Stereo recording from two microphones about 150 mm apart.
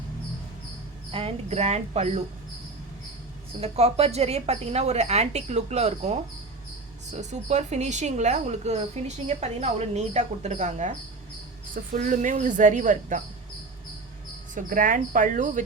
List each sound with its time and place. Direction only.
1.1 s speech: 45° right (ahead or behind)
3.6 s speech: 45° right (ahead or behind)
7.2 s speech: 50° right (ahead or behind)
14.5 s speech: 65° right (ahead or behind)